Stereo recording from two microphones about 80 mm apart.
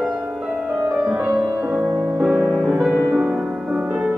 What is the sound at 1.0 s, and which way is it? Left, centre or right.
Music, right.